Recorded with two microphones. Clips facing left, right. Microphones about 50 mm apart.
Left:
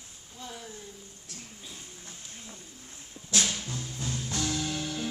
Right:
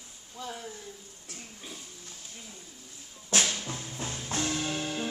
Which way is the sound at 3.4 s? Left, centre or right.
Right.